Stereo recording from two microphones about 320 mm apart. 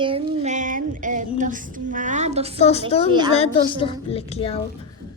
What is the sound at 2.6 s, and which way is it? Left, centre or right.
A woman's voice, centre.